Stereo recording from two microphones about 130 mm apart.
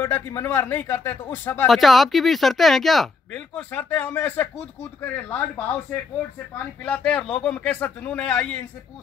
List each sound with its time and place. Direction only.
0.0 s a man's voice: 20° left (ahead or behind)
1.7 s a man's voice: centre (ahead or behind)
6.8 s a man's voice: 10° left (ahead or behind)